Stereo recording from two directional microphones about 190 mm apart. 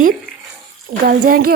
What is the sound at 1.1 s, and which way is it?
Speech, 50° right (ahead or behind).